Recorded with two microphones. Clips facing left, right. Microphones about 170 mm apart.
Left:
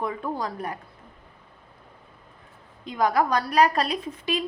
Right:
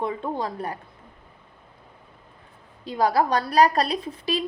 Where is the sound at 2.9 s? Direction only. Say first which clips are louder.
Right 1 dB; 30° right (ahead or behind).